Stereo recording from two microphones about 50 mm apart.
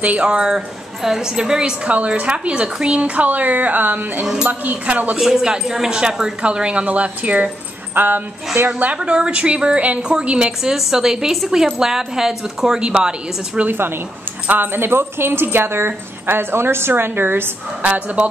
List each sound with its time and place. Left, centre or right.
0.2 s a woman's voice: centre
3.3 s speech: right
5.2 s a woman's voice: centre; by 7.4 s right
7.9 s speech: right
8.6 s a woman's voice: right
8.9 s a woman's voice: right
12.8 s a woman's voice: centre
13.7 s a woman's voice: right
16.9 s a woman's voice: right
17.8 s a woman's voice: right